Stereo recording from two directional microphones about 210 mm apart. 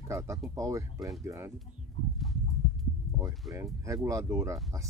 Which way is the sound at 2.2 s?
Centre (ahead or behind).